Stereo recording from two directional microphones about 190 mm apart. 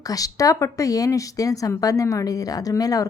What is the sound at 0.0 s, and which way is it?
Speech, 20° left (ahead or behind).